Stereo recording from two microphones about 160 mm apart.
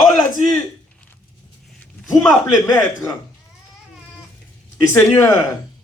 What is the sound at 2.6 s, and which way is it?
Speech, 15° left (ahead or behind).